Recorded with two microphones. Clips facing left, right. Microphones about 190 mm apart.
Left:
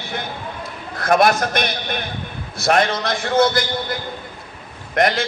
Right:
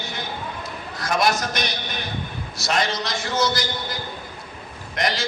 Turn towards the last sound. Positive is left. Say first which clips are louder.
# left 7 dB
turn(degrees=55)  # may be behind; listen again after turning